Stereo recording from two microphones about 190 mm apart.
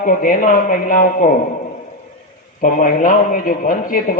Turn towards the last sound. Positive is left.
turn(degrees=45)  # may be behind; listen again after turning